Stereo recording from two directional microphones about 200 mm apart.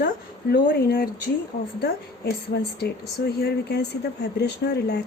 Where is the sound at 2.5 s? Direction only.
55° left (ahead or behind).